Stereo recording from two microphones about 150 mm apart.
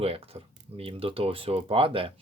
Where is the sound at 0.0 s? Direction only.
40° right (ahead or behind).